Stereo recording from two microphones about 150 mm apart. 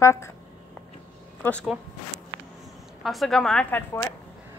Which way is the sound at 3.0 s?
Centre (ahead or behind).